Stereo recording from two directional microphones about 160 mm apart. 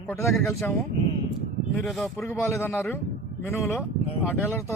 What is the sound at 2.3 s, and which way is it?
Speech, 15° left (ahead or behind).